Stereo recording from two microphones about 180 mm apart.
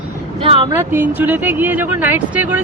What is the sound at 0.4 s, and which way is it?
Vehicle, 30° right (ahead or behind).